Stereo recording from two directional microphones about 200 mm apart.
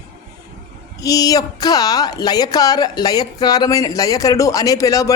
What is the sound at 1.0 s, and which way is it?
Speech, 20° left (ahead or behind).